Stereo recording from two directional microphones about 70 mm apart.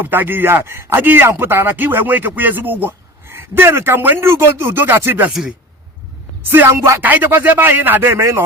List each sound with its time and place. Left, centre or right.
0.0 s speech: right
5.3 s speech: centre
6.7 s speech: right
7.0 s speech: right
8.2 s speech: right